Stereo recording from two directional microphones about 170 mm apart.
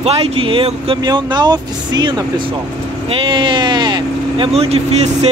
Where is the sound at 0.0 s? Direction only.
35° right (ahead or behind).